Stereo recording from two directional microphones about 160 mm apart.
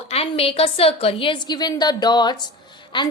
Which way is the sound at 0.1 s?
40° left (ahead or behind).